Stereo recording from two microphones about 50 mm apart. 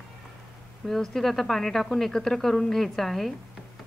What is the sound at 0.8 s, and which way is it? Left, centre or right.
Speech, centre.